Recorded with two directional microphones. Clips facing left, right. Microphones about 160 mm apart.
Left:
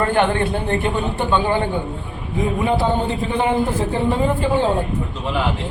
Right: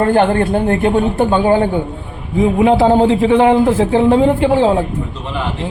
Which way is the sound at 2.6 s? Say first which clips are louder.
Right 9 dB; 90° right.